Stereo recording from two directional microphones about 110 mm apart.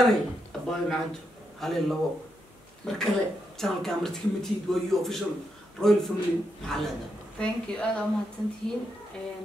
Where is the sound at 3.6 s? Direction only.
5° left (ahead or behind).